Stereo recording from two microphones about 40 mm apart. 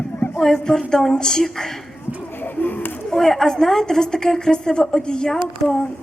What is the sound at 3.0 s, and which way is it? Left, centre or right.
A woman's voice, centre.